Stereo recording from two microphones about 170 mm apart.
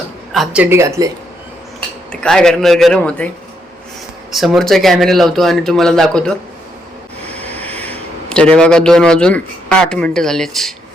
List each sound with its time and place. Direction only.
0.3 s speech: 10° right (ahead or behind)
2.2 s speech: 5° left (ahead or behind)
4.3 s speech: centre (ahead or behind)
7.3 s speech: 10° left (ahead or behind)